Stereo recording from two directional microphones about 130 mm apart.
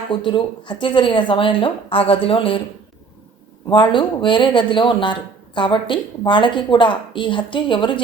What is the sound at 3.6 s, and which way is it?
Speech, 35° left (ahead or behind).